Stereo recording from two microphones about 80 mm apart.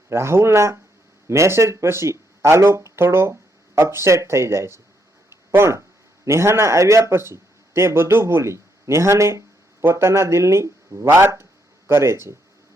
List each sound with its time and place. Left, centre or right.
0.1 s speech: right
5.3 s a sound: right
6.2 s speech: right